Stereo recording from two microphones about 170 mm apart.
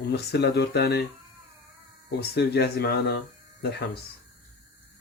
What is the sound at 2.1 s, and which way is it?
Speech, 75° left (ahead or behind).